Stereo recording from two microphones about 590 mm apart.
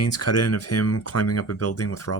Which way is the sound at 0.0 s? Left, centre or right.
Left.